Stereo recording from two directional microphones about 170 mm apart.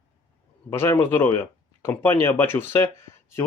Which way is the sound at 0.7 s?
15° left (ahead or behind).